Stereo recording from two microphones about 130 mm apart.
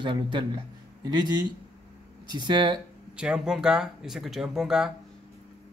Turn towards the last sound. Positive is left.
turn(degrees=-5)  # may be behind; listen again after turning